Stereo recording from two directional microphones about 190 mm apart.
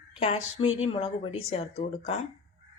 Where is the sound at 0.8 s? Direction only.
30° left (ahead or behind).